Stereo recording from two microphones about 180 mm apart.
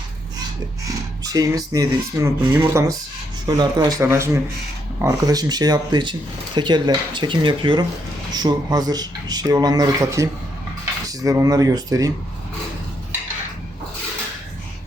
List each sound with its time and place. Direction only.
0.9 s speech: 20° right (ahead or behind)